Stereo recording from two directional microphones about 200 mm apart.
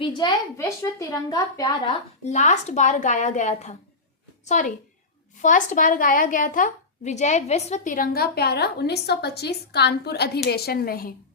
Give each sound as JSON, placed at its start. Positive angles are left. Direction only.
{"t": 0.0, "sound": "a woman's voice", "side_deg": 20}
{"t": 2.2, "sound": "a woman's voice", "side_deg": 35}